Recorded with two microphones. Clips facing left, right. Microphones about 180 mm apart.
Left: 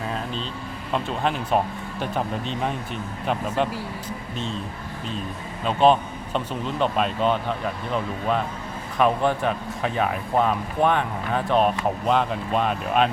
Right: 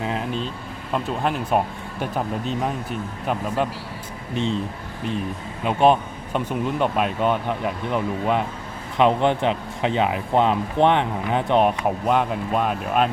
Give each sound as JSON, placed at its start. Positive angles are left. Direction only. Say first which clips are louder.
{"t": 0.0, "sound": "vehicle", "louder": "right 3 dB", "side_deg": -15}
{"t": 0.9, "sound": "speech", "louder": "right 1 dB", "side_deg": -5}
{"t": 4.4, "sound": "speech", "louder": "right 8 dB", "side_deg": -20}
{"t": 5.6, "sound": "speech", "louder": "right 1 dB", "side_deg": -15}